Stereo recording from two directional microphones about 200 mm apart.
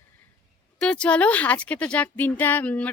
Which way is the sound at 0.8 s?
5° left (ahead or behind).